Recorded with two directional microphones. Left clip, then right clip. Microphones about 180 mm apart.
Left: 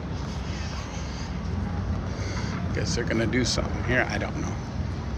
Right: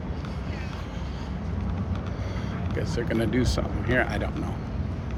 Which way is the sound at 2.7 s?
15° right (ahead or behind).